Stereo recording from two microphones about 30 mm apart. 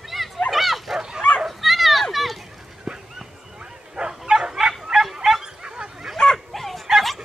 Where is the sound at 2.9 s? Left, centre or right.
Centre.